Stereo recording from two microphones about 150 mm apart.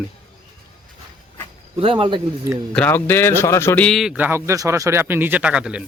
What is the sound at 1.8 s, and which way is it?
Speech, 35° right (ahead or behind).